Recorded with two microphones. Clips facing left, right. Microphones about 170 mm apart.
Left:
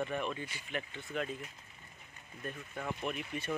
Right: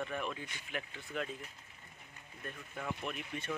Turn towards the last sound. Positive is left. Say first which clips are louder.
# left 3 dB
turn(degrees=5)  # may be behind; listen again after turning